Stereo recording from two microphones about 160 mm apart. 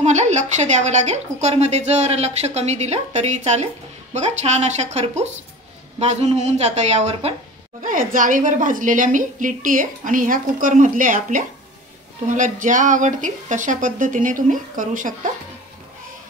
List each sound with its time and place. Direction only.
0.0 s a woman's voice: 45° right (ahead or behind)
7.8 s a woman's voice: 55° right (ahead or behind)